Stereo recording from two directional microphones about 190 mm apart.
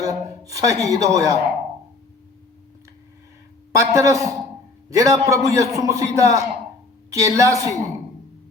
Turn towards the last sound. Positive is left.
turn(degrees=-15)  # may be behind; listen again after turning